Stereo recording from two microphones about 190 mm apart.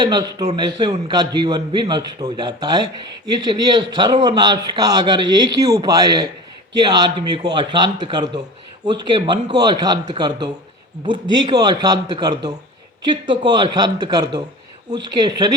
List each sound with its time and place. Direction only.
0.0 s a man's voice: 20° right (ahead or behind)